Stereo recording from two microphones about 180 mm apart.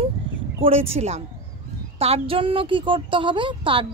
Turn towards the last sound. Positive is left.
turn(degrees=-30)  # may be behind; listen again after turning